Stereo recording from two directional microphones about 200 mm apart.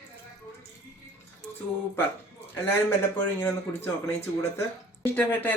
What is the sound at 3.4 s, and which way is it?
Speech, 15° left (ahead or behind).